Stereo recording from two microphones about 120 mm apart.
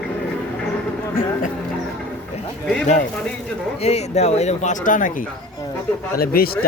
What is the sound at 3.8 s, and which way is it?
Speech, 60° left (ahead or behind).